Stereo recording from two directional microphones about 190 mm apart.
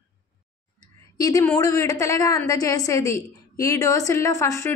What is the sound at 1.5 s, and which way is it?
A woman's voice, 20° left (ahead or behind).